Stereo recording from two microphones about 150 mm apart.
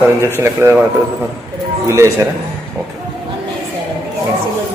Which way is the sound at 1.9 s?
20° right (ahead or behind).